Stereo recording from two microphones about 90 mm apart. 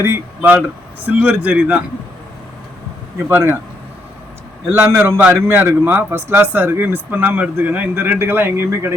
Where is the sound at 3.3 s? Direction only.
25° right (ahead or behind).